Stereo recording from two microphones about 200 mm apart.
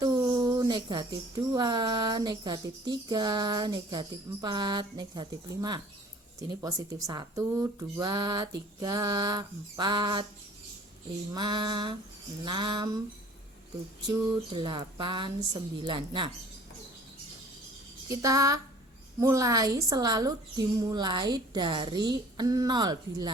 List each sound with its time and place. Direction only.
0.0 s a sound: 20° right (ahead or behind)
1.5 s a woman's voice: 20° right (ahead or behind)
11.3 s a woman's voice: 20° right (ahead or behind)
14.5 s a woman's voice: 25° right (ahead or behind)
18.1 s a sound: 15° right (ahead or behind)
19.2 s a woman's voice: 15° right (ahead or behind)